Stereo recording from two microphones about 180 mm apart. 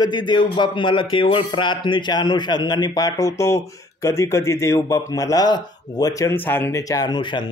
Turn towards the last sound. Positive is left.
turn(degrees=25)  # may be behind; listen again after turning